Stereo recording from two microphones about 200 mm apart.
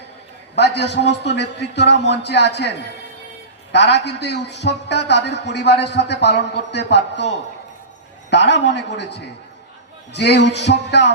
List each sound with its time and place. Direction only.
0.5 s a man's voice: 60° left (ahead or behind)